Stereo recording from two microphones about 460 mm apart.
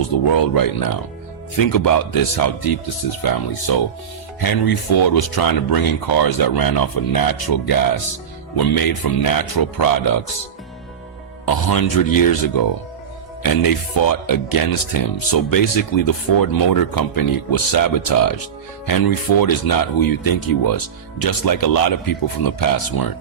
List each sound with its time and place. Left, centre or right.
0.3 s speech: left
11.7 s speech: left